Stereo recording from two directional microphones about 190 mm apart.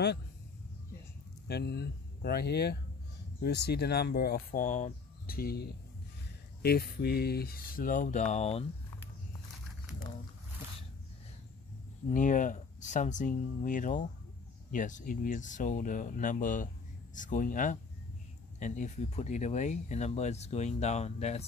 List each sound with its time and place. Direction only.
1.5 s speech: 60° left (ahead or behind); by 8.6 s 35° left (ahead or behind)
12.1 s speech: 45° left (ahead or behind)